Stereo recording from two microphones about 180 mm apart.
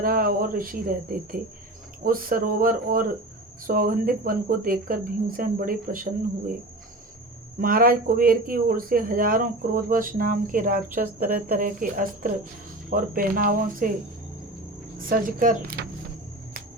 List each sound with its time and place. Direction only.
0.0 s speech: 50° right (ahead or behind)
7.6 s speech: 50° right (ahead or behind)
15.2 s speech: 50° right (ahead or behind)